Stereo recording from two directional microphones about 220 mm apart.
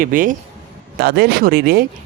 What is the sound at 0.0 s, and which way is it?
Speech, 40° right (ahead or behind).